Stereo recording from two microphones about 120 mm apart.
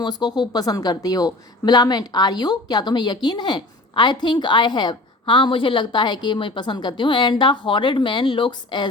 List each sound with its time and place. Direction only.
0.0 s speech: 40° left (ahead or behind)